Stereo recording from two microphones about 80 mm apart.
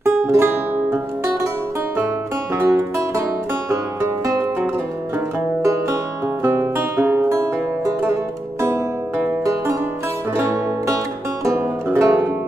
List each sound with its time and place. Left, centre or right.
0.3 s music: right
2.5 s music: right
5.6 s music: right
6.4 s music: right
11.5 s music: right